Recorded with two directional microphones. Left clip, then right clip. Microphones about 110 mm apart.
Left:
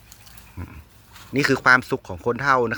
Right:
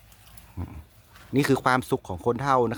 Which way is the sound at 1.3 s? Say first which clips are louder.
Left 6 dB; 40° right (ahead or behind).